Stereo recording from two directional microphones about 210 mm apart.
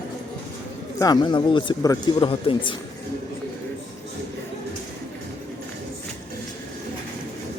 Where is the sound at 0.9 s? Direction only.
20° left (ahead or behind).